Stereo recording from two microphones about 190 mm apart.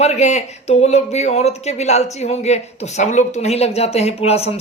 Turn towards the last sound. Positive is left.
turn(degrees=30)  # may be behind; listen again after turning